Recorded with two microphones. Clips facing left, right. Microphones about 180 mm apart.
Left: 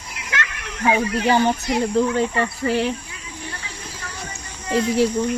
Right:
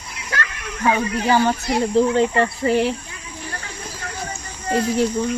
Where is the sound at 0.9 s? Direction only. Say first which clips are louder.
Even; 20° left (ahead or behind).